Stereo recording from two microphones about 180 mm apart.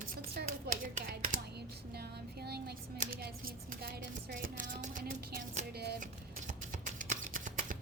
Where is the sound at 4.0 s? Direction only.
65° right (ahead or behind).